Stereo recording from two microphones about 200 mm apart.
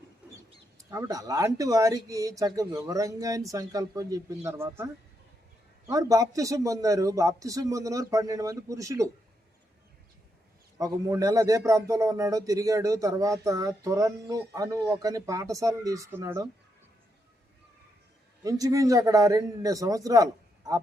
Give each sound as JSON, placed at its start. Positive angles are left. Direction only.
{"t": 0.2, "sound": "bird", "side_deg": -5}
{"t": 0.9, "sound": "speech", "side_deg": -15}
{"t": 5.9, "sound": "speech", "side_deg": -15}
{"t": 10.8, "sound": "speech", "side_deg": -15}
{"t": 18.4, "sound": "speech", "side_deg": -15}